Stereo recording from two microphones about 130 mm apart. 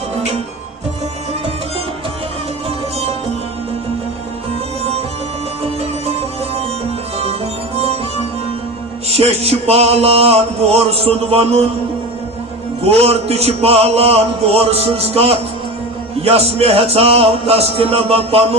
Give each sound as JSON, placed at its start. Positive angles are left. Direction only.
{"t": 4.8, "sound": "music", "side_deg": -50}
{"t": 9.0, "sound": "music", "side_deg": -50}
{"t": 12.8, "sound": "music", "side_deg": -50}